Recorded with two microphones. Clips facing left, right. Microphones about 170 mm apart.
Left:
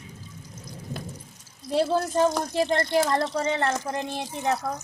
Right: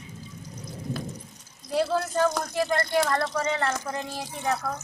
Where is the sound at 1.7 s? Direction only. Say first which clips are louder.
Left 2 dB; 25° left (ahead or behind).